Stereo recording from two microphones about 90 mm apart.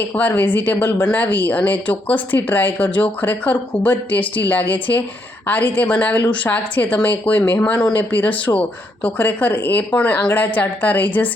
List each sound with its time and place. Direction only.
0.2 s a woman's voice: 20° left (ahead or behind)